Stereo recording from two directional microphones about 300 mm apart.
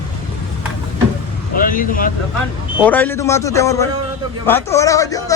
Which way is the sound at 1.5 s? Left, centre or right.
Left.